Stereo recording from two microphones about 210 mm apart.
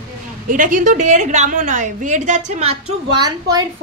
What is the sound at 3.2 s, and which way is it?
Speech, 15° right (ahead or behind).